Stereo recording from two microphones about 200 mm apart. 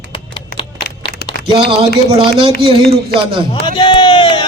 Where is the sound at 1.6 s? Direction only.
25° right (ahead or behind).